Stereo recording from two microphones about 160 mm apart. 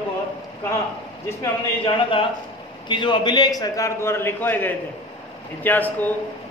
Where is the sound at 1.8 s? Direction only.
35° left (ahead or behind).